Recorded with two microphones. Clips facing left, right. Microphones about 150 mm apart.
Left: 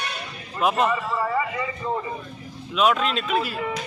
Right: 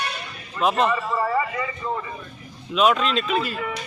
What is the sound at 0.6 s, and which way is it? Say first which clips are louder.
Speech: right 1 dB; 5° left (ahead or behind).